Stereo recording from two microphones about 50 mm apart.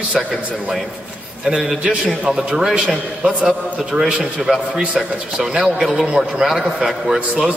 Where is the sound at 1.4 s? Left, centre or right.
Centre.